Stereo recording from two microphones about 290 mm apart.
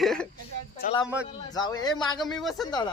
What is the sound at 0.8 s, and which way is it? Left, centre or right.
Speech, left.